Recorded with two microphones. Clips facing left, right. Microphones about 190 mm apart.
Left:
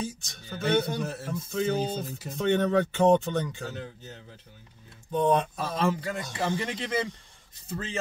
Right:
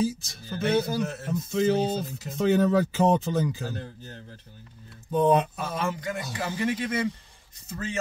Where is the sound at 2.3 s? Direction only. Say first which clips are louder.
Right 2 dB; 5° right (ahead or behind).